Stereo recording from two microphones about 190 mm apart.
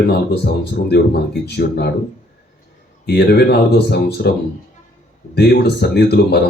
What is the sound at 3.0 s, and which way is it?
Speech, 60° left (ahead or behind).